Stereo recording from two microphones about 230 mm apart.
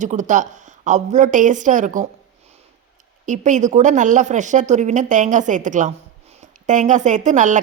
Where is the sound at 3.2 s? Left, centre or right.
Right.